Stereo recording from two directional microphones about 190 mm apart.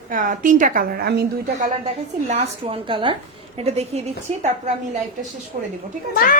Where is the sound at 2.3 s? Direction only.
30° right (ahead or behind).